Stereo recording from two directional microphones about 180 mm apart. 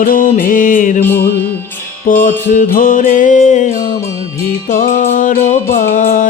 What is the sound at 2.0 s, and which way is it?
Music, 50° left (ahead or behind).